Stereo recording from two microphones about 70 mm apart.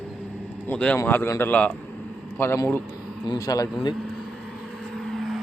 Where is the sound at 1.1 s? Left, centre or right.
Left.